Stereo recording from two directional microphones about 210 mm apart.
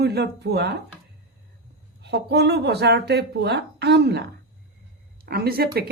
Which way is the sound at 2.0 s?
50° right (ahead or behind).